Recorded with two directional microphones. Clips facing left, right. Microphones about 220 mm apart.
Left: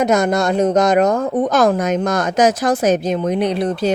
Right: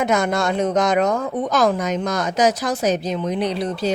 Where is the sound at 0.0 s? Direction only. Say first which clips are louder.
Left 4 dB; 45° left (ahead or behind).